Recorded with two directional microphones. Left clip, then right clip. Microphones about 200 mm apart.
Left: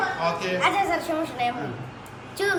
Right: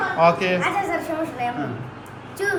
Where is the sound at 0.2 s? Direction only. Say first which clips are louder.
Right 8 dB; 15° right (ahead or behind).